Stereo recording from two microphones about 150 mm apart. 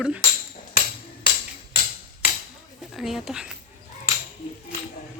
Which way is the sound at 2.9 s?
Centre (ahead or behind).